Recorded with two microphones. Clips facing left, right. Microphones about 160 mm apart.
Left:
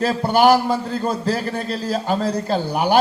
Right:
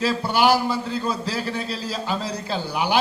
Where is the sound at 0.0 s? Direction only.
50° left (ahead or behind).